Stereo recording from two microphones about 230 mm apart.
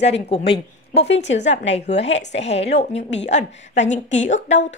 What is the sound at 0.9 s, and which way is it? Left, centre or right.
Speech, left.